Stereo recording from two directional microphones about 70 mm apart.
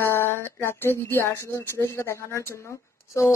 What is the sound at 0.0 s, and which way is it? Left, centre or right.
Speech, left.